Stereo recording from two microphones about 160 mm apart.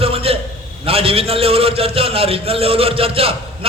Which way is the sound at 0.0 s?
35° right (ahead or behind).